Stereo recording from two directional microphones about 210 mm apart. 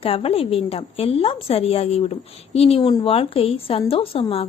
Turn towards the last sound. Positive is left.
turn(degrees=25)  # may be behind; listen again after turning